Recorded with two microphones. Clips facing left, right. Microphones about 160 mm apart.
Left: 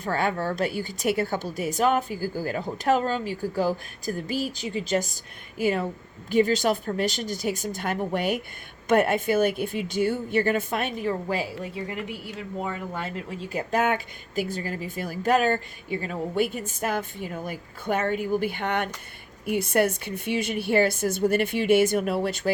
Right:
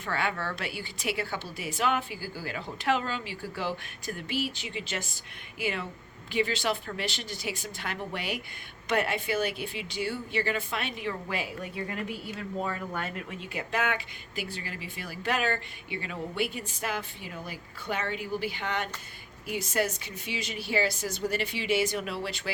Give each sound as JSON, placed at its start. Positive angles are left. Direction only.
{"t": 0.0, "sound": "a woman's voice", "side_deg": 40}